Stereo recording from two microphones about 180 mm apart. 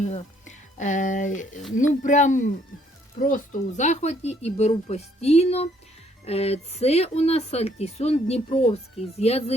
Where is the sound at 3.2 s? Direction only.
45° left (ahead or behind).